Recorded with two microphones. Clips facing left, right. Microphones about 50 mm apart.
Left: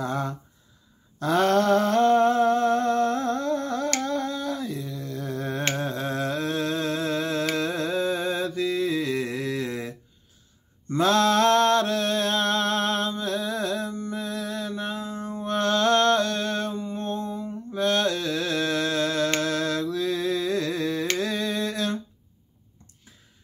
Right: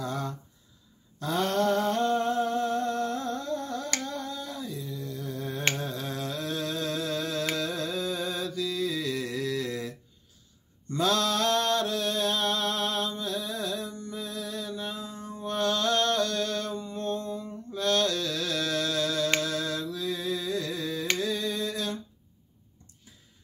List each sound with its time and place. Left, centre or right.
0.0 s speech: left
1.2 s humming: left
5.8 s humming: left
7.5 s mantra: left
10.9 s mantra: left
19.4 s mantra: left
21.2 s a sound: left